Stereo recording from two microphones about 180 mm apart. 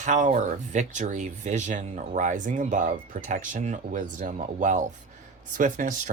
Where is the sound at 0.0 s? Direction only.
45° right (ahead or behind).